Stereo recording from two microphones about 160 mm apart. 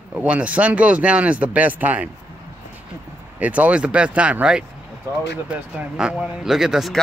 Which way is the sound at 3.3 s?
10° right (ahead or behind).